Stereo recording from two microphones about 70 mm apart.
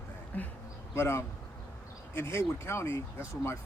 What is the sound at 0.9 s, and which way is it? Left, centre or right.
Speech, left.